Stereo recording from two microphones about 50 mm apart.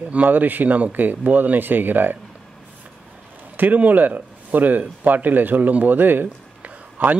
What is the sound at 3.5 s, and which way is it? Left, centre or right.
A man's voice, right.